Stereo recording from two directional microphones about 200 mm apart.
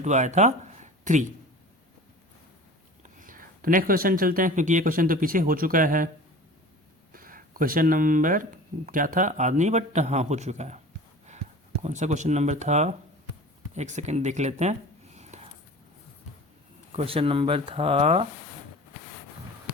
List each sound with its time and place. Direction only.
0.0 s speech: 35° right (ahead or behind)
3.0 s speech: 40° right (ahead or behind)
7.1 s a man's voice: 45° right (ahead or behind)
11.8 s a man's voice: 35° right (ahead or behind)
16.9 s speech: 30° right (ahead or behind)